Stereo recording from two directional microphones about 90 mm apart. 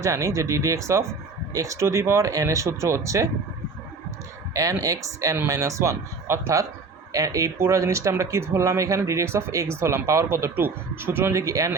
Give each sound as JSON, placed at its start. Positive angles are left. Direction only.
{"t": 0.0, "sound": "speech", "side_deg": -35}
{"t": 4.8, "sound": "speech", "side_deg": -40}